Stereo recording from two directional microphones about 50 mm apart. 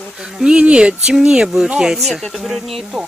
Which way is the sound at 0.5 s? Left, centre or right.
Right.